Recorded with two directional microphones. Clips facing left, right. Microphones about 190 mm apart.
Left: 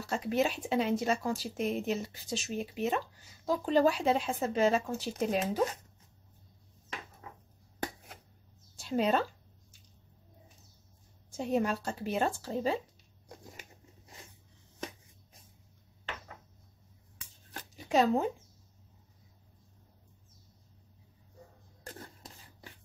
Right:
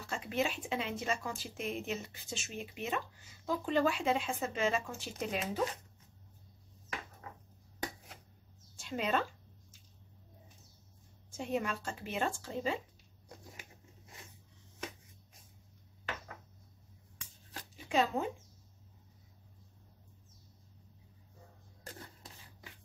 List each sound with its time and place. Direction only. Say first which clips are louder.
0.0 s speech: left 5 dB; 40° left (ahead or behind)
8.7 s speech: left 5 dB; 35° left (ahead or behind)
11.2 s speech: left 5 dB; 40° left (ahead or behind)
17.7 s a sound: left 5 dB; 40° left (ahead or behind)